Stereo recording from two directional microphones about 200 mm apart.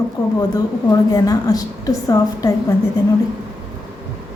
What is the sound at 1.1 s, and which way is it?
A woman's voice, 20° left (ahead or behind).